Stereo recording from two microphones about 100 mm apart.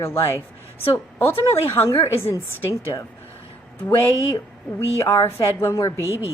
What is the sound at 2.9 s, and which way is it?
Speech, 40° left (ahead or behind).